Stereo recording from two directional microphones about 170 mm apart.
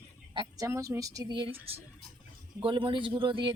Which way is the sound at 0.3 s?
20° right (ahead or behind).